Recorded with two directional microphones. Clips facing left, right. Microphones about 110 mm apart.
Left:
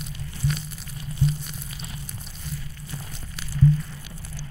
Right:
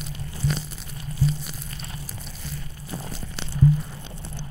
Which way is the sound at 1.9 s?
30° right (ahead or behind).